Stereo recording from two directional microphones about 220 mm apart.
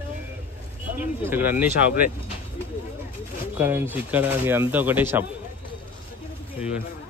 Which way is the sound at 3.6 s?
10° right (ahead or behind).